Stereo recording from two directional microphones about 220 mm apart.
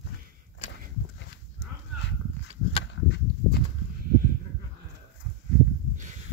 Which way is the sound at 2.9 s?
55° left (ahead or behind).